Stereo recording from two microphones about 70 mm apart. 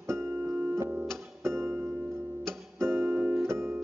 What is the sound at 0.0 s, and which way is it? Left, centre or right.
Music, right.